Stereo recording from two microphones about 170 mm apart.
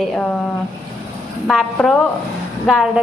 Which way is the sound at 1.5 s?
Centre (ahead or behind).